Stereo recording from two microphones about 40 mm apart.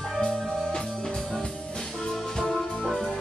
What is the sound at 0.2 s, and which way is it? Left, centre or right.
Music, centre.